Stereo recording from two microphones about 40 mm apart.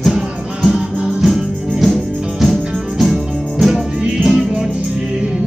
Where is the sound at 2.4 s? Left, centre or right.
Centre.